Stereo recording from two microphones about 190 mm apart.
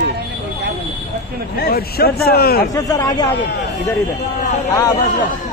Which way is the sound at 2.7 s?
20° left (ahead or behind).